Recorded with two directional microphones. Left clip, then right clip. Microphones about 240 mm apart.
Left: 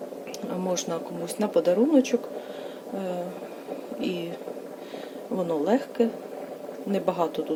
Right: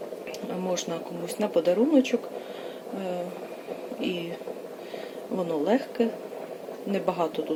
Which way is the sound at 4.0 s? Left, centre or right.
Centre.